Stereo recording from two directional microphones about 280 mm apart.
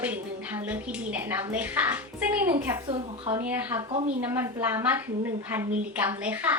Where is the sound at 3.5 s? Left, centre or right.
Centre.